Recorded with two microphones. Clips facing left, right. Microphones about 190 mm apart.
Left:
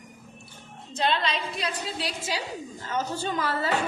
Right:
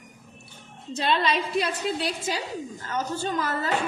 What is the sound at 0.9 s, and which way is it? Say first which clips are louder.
A woman's voice: right 2 dB; 60° right (ahead or behind).